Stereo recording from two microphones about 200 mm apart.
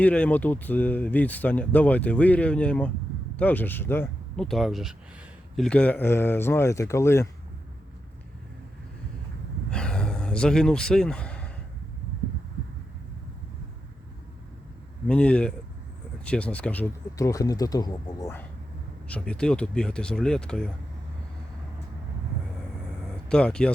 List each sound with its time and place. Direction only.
0.0 s speech: 5° left (ahead or behind)
9.6 s a sound: 5° left (ahead or behind)
15.0 s speech: 5° left (ahead or behind)
23.3 s speech: 5° left (ahead or behind)